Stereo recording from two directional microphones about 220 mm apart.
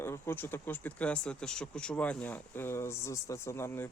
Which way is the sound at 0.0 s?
10° left (ahead or behind).